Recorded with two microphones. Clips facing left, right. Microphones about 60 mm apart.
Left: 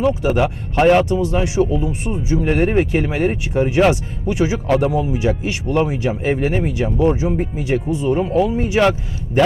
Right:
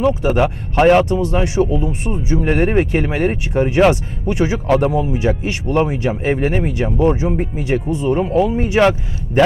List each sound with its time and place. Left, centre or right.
0.0 s speech: right
8.8 s speech: right